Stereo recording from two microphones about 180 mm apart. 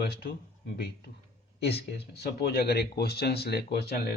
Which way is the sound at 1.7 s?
65° left (ahead or behind).